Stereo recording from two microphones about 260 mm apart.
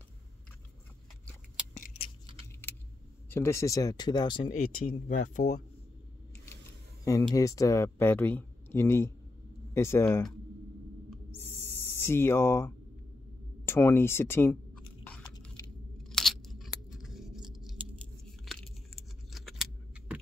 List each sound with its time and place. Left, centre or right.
2.6 s a sound: centre
3.3 s speech: centre
4.8 s speech: left
7.1 s speech: centre
11.1 s owl: centre
13.7 s a sound: centre
16.0 s scissors: centre